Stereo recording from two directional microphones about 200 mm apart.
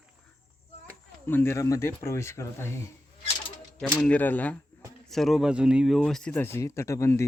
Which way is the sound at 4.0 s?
5° left (ahead or behind).